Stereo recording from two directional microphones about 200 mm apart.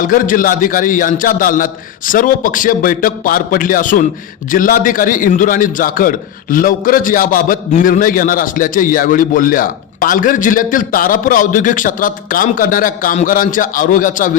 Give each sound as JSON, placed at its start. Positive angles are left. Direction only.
{"t": 0.0, "sound": "a man's voice", "side_deg": 45}